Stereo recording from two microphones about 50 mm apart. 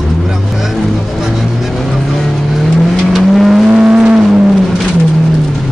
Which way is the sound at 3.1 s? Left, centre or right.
Centre.